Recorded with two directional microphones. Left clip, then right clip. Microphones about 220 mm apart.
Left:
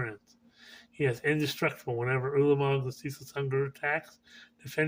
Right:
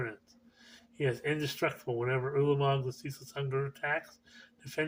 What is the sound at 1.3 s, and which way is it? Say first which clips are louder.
Speech: left 3 dB; 50° left (ahead or behind).